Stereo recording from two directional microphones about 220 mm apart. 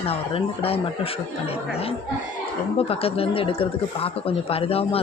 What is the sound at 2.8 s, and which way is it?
Speech, 25° left (ahead or behind).